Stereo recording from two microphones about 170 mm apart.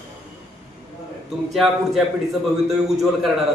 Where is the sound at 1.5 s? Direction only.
Centre (ahead or behind).